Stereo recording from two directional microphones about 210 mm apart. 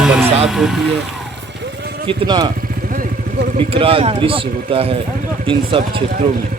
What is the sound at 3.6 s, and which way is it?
Speech, 25° right (ahead or behind).